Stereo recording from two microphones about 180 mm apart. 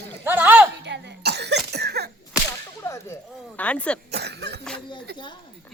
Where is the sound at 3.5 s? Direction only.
5° left (ahead or behind).